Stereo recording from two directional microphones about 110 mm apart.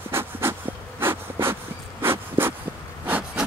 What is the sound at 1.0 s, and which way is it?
Bee, 20° right (ahead or behind).